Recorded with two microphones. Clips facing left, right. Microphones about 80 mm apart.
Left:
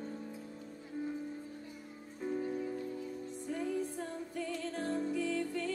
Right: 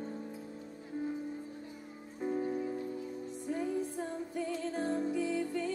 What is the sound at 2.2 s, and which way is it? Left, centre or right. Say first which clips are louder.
Music: right 2 dB; centre.